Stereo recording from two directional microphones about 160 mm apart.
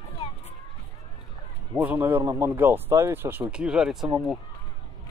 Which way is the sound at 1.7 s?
10° right (ahead or behind).